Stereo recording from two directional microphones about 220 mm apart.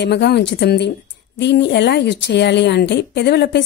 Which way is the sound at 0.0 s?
50° left (ahead or behind).